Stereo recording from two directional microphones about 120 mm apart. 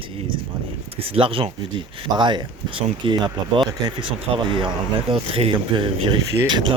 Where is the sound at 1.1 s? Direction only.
50° right (ahead or behind).